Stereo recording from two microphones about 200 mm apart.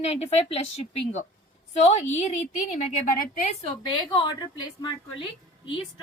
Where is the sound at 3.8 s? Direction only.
25° left (ahead or behind).